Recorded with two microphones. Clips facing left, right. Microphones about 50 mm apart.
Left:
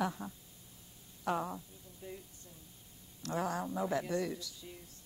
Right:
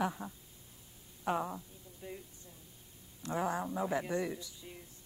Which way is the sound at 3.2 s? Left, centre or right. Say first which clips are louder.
Right 1 dB; centre.